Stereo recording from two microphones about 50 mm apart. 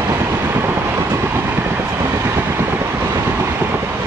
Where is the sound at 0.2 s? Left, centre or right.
Right.